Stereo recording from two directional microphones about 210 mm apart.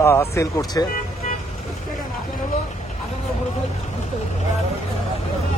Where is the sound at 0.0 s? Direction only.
15° left (ahead or behind).